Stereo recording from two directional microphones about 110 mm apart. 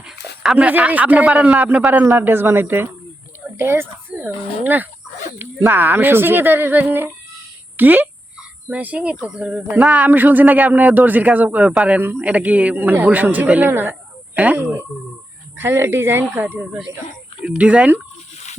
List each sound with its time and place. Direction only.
0.0 s speech: 10° right (ahead or behind)
14.6 s speech: 25° right (ahead or behind)